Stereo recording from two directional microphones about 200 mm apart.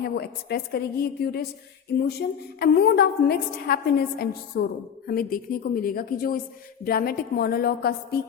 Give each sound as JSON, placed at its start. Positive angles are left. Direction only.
{"t": 0.0, "sound": "a woman's voice", "side_deg": 50}